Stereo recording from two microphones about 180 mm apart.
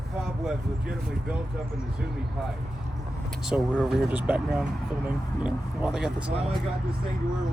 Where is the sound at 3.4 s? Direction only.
Centre (ahead or behind).